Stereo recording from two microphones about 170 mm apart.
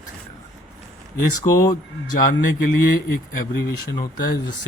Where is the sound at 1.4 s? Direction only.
20° left (ahead or behind).